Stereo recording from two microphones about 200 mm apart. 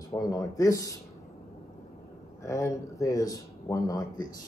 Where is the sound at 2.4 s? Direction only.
15° left (ahead or behind).